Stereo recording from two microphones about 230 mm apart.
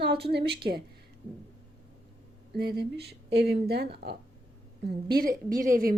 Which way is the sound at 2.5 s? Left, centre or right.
Right.